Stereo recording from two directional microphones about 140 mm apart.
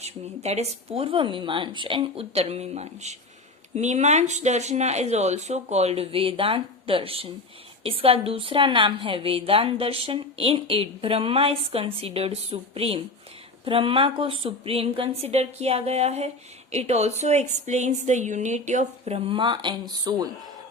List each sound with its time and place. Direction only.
0.0 s a woman's voice: 50° right (ahead or behind); by 20.3 s 30° right (ahead or behind)